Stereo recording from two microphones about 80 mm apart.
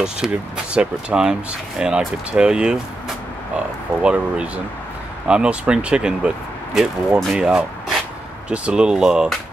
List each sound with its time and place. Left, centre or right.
0.0 s speech: centre
4.0 s speech: centre